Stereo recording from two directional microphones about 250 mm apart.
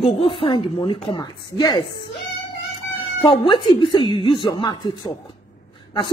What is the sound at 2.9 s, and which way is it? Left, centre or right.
A woman's voice, left.